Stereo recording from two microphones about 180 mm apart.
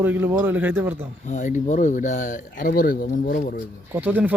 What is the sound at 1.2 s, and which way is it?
Speech, 40° left (ahead or behind).